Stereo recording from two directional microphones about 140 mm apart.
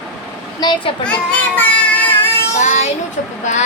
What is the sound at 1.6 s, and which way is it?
Music, 10° left (ahead or behind).